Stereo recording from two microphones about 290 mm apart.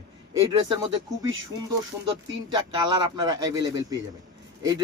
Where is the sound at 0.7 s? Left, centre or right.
Centre.